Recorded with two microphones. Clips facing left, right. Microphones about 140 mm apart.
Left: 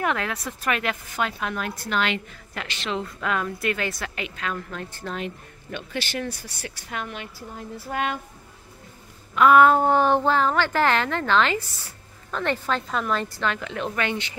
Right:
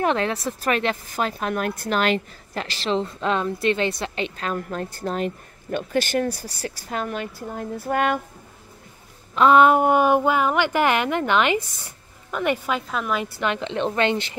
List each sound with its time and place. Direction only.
0.0 s a woman's voice: 30° right (ahead or behind); by 8.2 s 50° right (ahead or behind)
9.3 s a woman's voice: 25° right (ahead or behind)